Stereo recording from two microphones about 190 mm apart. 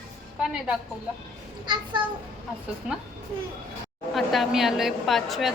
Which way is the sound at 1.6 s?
25° right (ahead or behind).